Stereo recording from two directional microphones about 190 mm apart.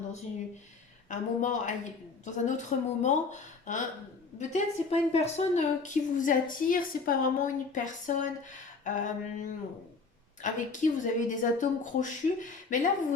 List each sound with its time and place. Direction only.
1.1 s a woman's voice: 40° left (ahead or behind)
8.8 s a sound: 40° left (ahead or behind)
10.4 s a woman's voice: 40° left (ahead or behind)